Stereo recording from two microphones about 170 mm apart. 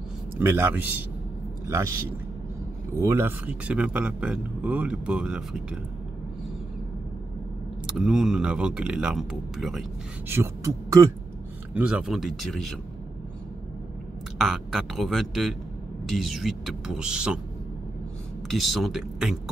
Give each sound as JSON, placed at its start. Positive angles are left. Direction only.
{"t": 0.4, "sound": "speech", "side_deg": -15}
{"t": 3.0, "sound": "speech", "side_deg": -15}
{"t": 7.8, "sound": "speech", "side_deg": -5}
{"t": 10.2, "sound": "speech", "side_deg": -15}
{"t": 11.7, "sound": "speech", "side_deg": -5}
{"t": 14.4, "sound": "speech", "side_deg": 0}
{"t": 18.5, "sound": "speech", "side_deg": 0}